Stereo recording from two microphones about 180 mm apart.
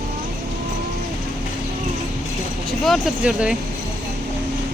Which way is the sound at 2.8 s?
Centre (ahead or behind).